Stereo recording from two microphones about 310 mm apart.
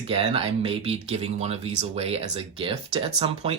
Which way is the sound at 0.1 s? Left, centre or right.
Centre.